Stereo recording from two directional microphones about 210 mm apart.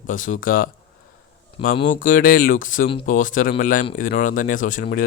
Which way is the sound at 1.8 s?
40° left (ahead or behind).